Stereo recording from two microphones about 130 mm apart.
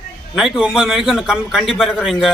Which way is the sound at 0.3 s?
5° right (ahead or behind).